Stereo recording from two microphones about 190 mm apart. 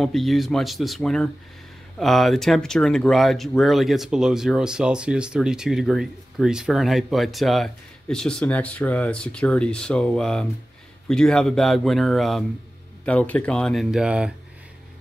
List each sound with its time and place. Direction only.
0.0 s speech: centre (ahead or behind)